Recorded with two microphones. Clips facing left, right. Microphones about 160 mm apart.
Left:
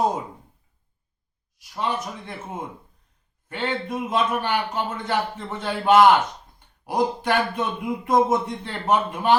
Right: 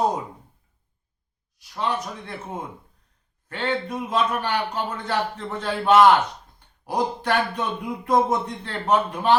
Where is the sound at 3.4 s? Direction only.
10° left (ahead or behind).